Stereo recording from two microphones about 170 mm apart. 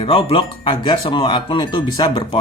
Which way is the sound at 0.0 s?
35° left (ahead or behind).